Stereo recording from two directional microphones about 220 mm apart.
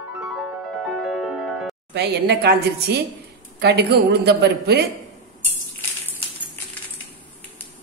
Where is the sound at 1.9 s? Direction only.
50° right (ahead or behind).